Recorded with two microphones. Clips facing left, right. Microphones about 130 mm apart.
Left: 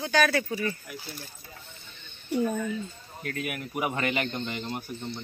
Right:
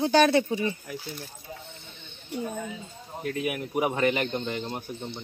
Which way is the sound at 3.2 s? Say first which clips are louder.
Right 4 dB; centre (ahead or behind).